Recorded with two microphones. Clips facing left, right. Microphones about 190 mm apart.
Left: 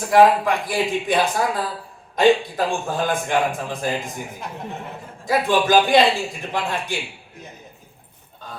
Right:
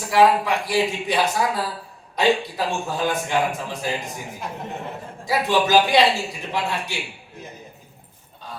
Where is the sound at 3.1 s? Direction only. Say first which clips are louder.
Left 1 dB; 50° left (ahead or behind).